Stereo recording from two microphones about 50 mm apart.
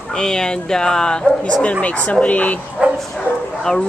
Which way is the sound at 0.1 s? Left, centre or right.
Centre.